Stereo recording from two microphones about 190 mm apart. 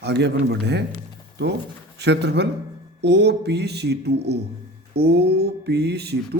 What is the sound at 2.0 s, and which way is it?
Speech, 60° right (ahead or behind).